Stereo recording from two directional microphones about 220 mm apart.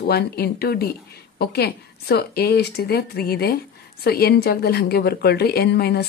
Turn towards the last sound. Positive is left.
turn(degrees=45)  # may be behind; listen again after turning